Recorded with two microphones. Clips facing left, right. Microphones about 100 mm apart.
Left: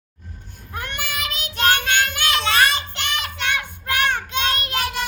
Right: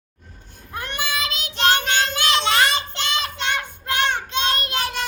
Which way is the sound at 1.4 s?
30° right (ahead or behind).